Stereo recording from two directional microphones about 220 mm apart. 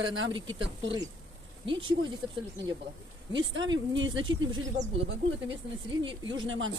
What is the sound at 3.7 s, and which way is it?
Speech, 60° right (ahead or behind).